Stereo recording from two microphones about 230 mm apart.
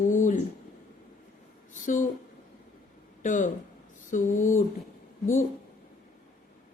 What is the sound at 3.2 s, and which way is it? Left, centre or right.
Speech, left.